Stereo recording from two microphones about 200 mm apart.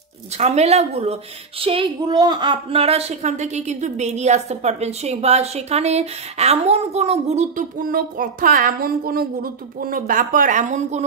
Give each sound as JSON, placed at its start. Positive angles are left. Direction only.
{"t": 0.4, "sound": "a woman's voice", "side_deg": -30}